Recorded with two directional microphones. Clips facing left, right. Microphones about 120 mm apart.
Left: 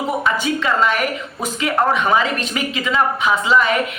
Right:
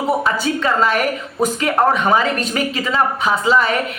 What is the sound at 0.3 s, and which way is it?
Speech, 35° right (ahead or behind).